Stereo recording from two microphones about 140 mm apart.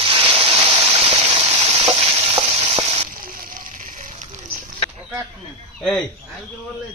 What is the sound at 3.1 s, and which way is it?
Fire, 80° right.